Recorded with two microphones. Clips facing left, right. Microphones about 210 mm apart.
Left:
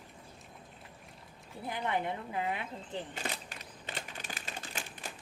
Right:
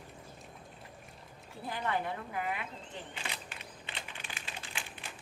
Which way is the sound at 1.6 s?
20° left (ahead or behind).